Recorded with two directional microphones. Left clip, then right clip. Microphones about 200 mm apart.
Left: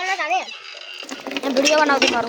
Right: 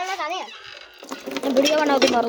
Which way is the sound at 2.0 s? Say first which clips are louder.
Even; 35° right (ahead or behind).